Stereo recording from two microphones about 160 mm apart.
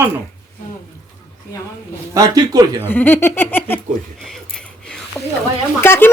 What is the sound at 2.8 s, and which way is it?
A woman's voice, 10° left (ahead or behind).